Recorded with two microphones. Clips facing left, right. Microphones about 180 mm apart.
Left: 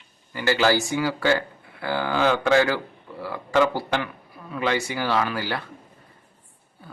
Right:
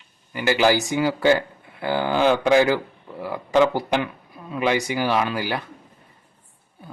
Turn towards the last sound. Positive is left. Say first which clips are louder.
# right 2 dB
turn(degrees=-15)  # may be behind; listen again after turning